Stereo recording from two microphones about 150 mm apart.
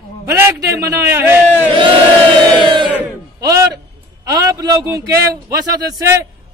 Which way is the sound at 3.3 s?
25° right (ahead or behind).